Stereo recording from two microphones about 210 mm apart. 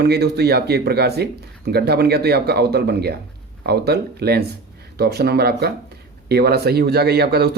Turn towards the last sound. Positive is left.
turn(degrees=-50)  # may be behind; listen again after turning